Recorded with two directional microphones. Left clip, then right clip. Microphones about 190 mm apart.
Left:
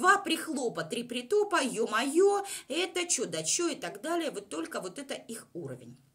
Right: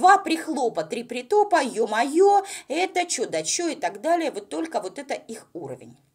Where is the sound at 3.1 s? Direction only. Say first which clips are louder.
Right 6 dB; 55° left (ahead or behind).